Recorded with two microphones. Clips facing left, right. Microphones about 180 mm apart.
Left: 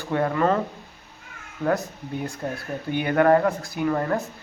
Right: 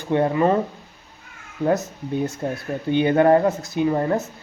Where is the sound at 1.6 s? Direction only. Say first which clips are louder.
Right 3 dB; 20° right (ahead or behind).